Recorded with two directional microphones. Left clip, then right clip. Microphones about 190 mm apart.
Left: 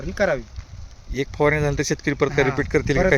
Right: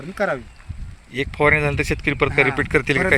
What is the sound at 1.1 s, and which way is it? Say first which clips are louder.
Speech: right 3 dB; 10° left (ahead or behind).